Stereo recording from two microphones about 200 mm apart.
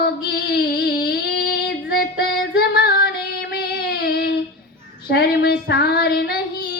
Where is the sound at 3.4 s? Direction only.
50° left (ahead or behind).